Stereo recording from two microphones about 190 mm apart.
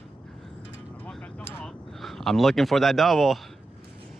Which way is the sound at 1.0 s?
5° left (ahead or behind).